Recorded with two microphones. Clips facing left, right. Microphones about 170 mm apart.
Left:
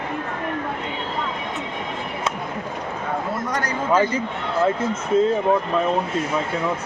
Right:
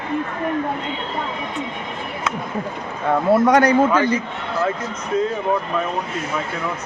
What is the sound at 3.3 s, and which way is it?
Speech, 70° right (ahead or behind).